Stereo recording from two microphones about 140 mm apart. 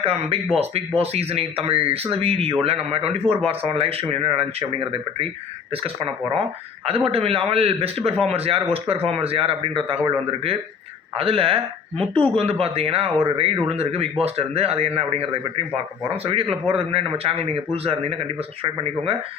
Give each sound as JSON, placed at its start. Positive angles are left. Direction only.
{"t": 0.0, "sound": "speech", "side_deg": -45}
{"t": 5.7, "sound": "speech", "side_deg": -45}
{"t": 11.1, "sound": "speech", "side_deg": -45}